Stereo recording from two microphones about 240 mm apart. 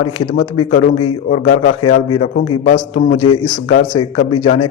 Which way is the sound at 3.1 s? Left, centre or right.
Left.